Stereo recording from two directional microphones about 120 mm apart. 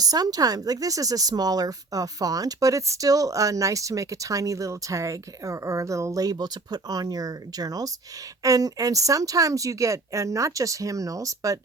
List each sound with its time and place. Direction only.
0.0 s speech: 30° right (ahead or behind)